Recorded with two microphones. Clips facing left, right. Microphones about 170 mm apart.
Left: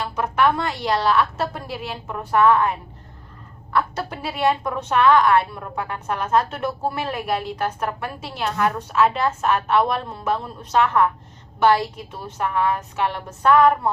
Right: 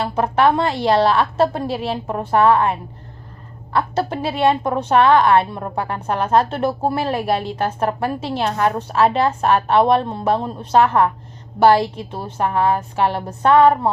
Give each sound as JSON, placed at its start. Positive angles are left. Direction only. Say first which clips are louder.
{"t": 0.0, "sound": "a woman's voice", "louder": "right 4 dB", "side_deg": -30}